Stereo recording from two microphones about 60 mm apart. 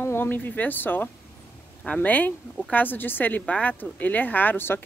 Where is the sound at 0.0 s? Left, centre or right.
Left.